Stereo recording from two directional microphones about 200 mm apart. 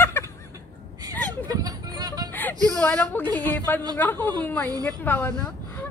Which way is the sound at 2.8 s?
5° left (ahead or behind).